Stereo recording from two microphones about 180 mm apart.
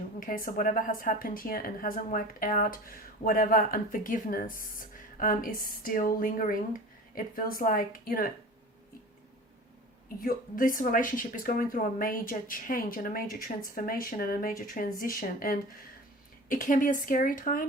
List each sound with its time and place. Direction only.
0.2 s a woman's voice: 50° left (ahead or behind)
10.2 s speech: 50° left (ahead or behind)